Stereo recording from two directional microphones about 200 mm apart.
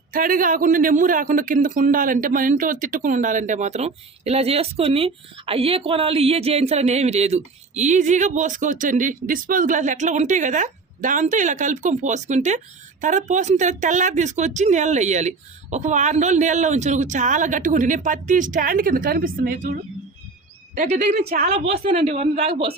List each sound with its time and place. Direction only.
0.1 s a man's voice: 45° right (ahead or behind)
20.7 s a man's voice: 35° right (ahead or behind)
21.4 s a woman's voice: 30° right (ahead or behind)